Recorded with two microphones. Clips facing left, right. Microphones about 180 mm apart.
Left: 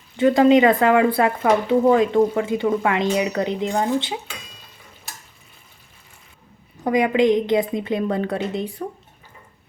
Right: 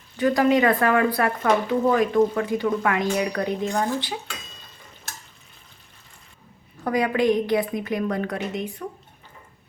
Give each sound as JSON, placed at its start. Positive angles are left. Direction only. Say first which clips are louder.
{"t": 0.2, "sound": "speech", "louder": "left 5 dB", "side_deg": 25}
{"t": 6.8, "sound": "speech", "louder": "left 4 dB", "side_deg": 20}